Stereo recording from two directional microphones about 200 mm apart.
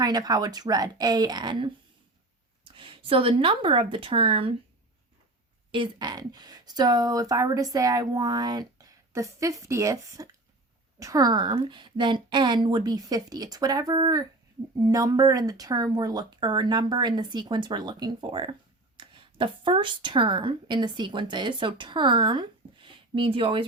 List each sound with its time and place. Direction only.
0.0 s speech: 20° right (ahead or behind)
5.7 s a woman's voice: 20° right (ahead or behind)